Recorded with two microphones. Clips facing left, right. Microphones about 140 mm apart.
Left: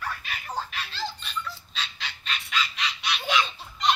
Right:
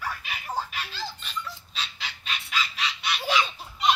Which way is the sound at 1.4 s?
10° right (ahead or behind).